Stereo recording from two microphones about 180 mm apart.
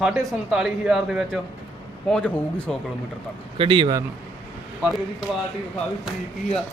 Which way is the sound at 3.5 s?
30° right (ahead or behind).